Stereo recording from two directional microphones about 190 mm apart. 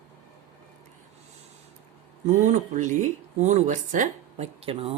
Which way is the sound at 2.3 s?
40° right (ahead or behind).